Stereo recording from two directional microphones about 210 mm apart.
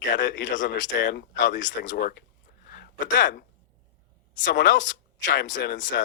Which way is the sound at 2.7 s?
40° left (ahead or behind).